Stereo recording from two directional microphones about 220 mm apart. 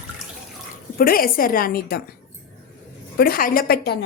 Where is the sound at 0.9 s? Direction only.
40° left (ahead or behind).